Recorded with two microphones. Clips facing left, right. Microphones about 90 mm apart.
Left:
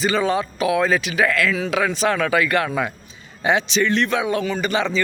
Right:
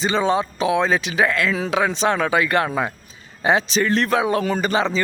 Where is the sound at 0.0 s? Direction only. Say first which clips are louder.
Right 1 dB; 30° right (ahead or behind).